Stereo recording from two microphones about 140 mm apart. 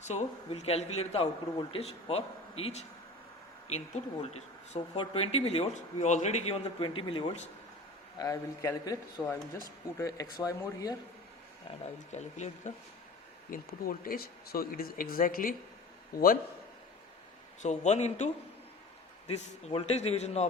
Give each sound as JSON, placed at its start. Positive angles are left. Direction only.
{"t": 0.0, "sound": "a man's voice", "side_deg": 55}
{"t": 6.8, "sound": "speech", "side_deg": 35}
{"t": 8.2, "sound": "speech", "side_deg": 25}
{"t": 12.1, "sound": "a man's voice", "side_deg": 55}
{"t": 13.5, "sound": "speech", "side_deg": 90}
{"t": 17.6, "sound": "a man's voice", "side_deg": 55}
{"t": 19.6, "sound": "a man's voice", "side_deg": 50}